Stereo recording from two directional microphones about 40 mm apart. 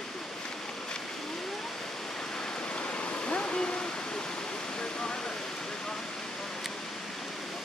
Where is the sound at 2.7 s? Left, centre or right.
Left.